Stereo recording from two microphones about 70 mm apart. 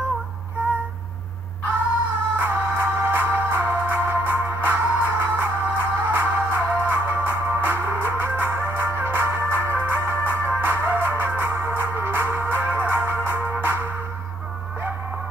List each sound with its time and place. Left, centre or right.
2.3 s music: right